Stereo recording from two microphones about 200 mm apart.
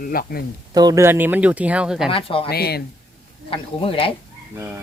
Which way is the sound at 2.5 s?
50° left (ahead or behind).